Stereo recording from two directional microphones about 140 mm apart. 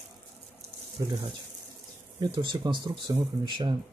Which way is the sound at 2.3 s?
35° right (ahead or behind).